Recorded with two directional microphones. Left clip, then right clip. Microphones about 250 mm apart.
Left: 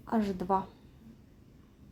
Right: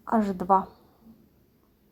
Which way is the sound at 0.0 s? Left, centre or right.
Centre.